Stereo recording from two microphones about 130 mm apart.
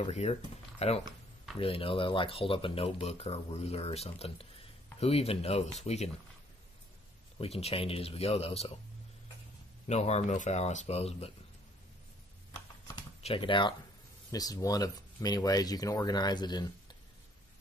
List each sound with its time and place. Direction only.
0.1 s speech: 55° left (ahead or behind)
7.3 s speech: 50° left (ahead or behind)
9.8 s speech: 55° left (ahead or behind)
13.2 s speech: 45° left (ahead or behind)
14.3 s speech: 30° left (ahead or behind)